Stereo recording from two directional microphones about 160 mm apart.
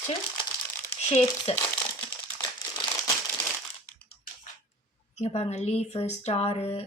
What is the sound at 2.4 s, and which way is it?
Crumpling, 25° left (ahead or behind).